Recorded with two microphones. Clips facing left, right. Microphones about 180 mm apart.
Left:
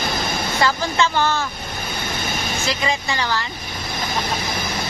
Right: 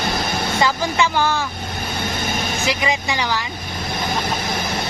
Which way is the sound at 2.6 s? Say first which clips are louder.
Right 1 dB; 15° right (ahead or behind).